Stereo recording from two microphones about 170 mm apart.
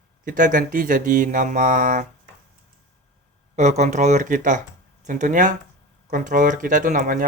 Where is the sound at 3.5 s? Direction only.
45° right (ahead or behind).